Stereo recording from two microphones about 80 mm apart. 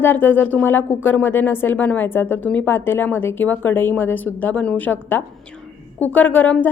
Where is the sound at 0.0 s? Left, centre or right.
Left.